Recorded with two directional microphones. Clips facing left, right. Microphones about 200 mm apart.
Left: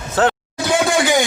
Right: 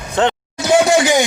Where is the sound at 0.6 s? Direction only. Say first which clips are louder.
Right 4 dB; 20° right (ahead or behind).